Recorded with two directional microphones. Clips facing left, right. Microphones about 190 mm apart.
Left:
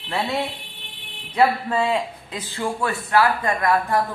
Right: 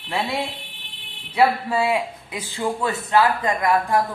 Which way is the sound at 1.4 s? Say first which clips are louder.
Even; 10° right (ahead or behind).